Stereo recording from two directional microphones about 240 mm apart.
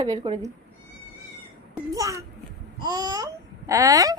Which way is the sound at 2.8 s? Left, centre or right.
Centre.